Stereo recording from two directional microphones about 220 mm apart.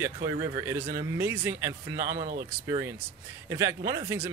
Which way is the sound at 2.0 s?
35° right (ahead or behind).